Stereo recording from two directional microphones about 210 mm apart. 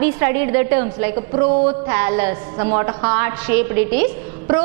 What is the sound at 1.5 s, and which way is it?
Music, 30° right (ahead or behind).